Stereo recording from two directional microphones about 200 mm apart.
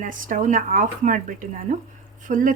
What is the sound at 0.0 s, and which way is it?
A woman's voice, 40° right (ahead or behind).